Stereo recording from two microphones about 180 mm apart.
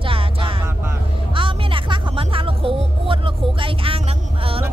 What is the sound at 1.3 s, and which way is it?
Music, 30° right (ahead or behind).